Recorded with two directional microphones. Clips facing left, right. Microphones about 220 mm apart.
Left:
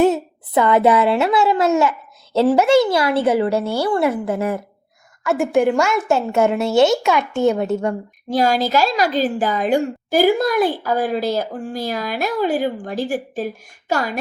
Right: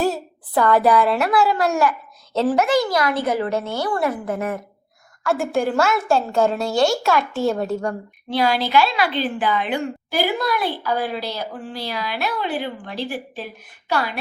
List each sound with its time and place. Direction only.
0.0 s a child's voice: 20° left (ahead or behind)
5.2 s a woman's voice: centre (ahead or behind)
5.8 s a child's voice: 15° left (ahead or behind)
8.3 s a woman's voice: 45° left (ahead or behind)